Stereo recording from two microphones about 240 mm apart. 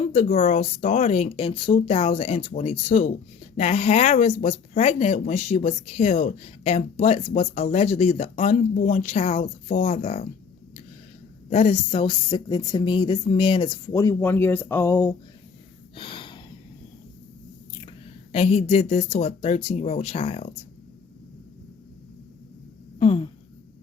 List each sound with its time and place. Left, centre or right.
0.0 s speech: left
11.4 s speech: left; by 15.1 s centre
16.0 s a sound: left
18.3 s speech: left
23.0 s speech: left